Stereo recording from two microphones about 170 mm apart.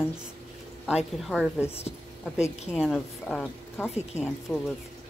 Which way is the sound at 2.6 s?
Centre (ahead or behind).